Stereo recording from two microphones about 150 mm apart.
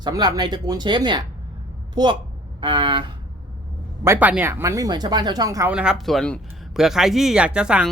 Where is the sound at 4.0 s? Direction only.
15° right (ahead or behind).